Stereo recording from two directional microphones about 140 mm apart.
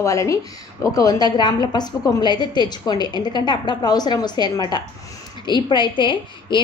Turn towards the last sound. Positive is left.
turn(degrees=35)  # may be behind; listen again after turning